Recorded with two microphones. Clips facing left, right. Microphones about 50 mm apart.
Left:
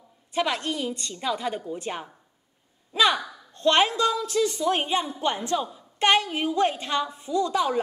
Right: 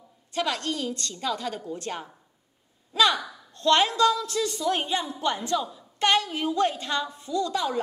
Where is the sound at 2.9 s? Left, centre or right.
Left.